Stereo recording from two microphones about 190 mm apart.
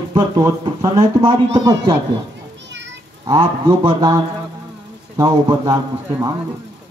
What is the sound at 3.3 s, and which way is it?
Speech, 25° right (ahead or behind).